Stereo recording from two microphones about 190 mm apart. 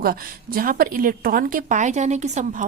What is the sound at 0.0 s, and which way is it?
A woman's voice, 50° right (ahead or behind).